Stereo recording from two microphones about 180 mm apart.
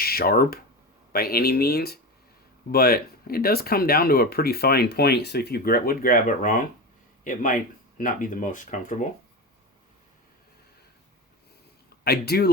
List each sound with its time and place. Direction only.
0.0 s speech: 55° left (ahead or behind)
12.0 s speech: 60° left (ahead or behind)